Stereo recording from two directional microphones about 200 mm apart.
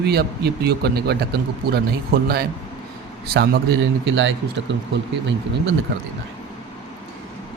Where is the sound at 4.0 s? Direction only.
65° right (ahead or behind).